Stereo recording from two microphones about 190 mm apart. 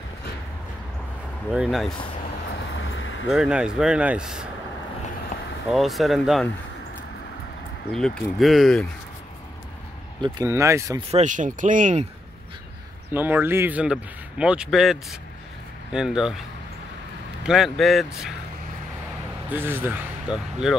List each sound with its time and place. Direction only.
1.5 s speech: 5° right (ahead or behind)
3.3 s speech: 5° right (ahead or behind)
5.7 s speech: centre (ahead or behind)
7.9 s speech: centre (ahead or behind)
10.2 s speech: 15° right (ahead or behind)
11.1 s speech: 40° right (ahead or behind)
13.1 s speech: 10° right (ahead or behind)
19.5 s speech: 10° right (ahead or behind)